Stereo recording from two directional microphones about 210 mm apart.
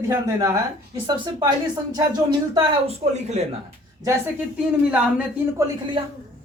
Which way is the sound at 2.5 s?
25° right (ahead or behind).